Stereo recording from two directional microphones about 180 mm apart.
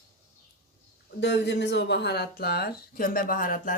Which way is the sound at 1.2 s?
70° left (ahead or behind).